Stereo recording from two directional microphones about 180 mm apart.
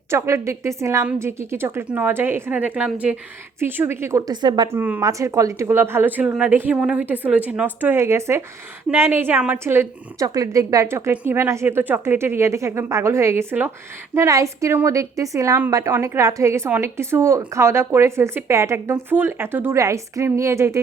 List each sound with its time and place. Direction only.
0.1 s a woman's voice: 15° right (ahead or behind)